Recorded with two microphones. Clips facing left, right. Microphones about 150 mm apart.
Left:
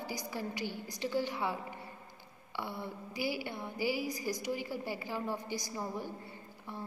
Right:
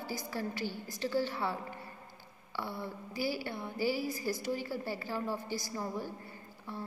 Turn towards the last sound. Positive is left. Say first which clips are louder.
# right 1 dB
turn(degrees=20)  # may be behind; listen again after turning